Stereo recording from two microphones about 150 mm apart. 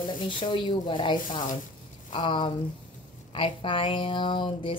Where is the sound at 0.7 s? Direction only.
30° left (ahead or behind).